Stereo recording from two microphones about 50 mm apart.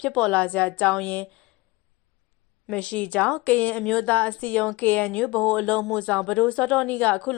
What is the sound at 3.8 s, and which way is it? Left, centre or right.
A woman's voice, centre.